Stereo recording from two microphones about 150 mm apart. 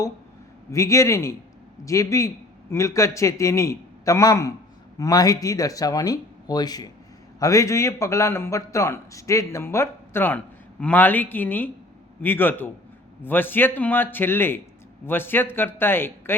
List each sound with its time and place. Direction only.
0.7 s a man's voice: 20° left (ahead or behind)